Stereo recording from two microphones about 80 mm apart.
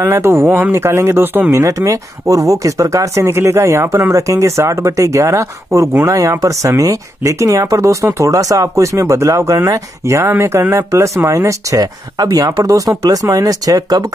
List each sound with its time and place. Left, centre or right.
0.0 s speech: right
1.6 s speech: right
11.8 s speech: right